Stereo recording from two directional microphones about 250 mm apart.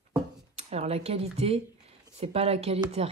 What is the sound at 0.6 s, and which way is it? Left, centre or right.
Speech, right.